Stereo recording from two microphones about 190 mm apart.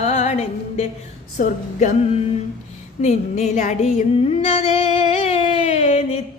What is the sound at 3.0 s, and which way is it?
Female singing, 35° left (ahead or behind).